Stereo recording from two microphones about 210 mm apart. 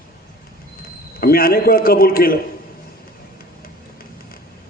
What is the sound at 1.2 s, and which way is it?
A man's voice, 45° left (ahead or behind).